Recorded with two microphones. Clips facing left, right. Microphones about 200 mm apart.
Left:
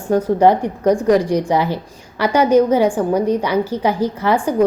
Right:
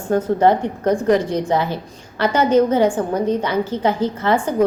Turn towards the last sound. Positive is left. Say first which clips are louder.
# left 1 dB
turn(degrees=15)  # may be behind; listen again after turning